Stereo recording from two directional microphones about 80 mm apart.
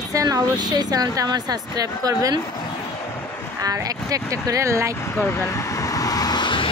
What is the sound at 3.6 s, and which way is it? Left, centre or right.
Speech, right.